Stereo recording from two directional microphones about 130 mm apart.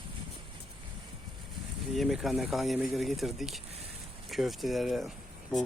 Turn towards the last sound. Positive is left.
turn(degrees=0)  # may be behind; listen again after turning